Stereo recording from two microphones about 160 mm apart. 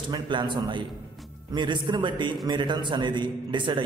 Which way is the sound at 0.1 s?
30° right (ahead or behind).